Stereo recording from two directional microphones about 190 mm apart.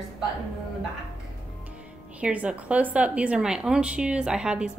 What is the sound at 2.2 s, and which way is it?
A woman's voice, 5° right (ahead or behind).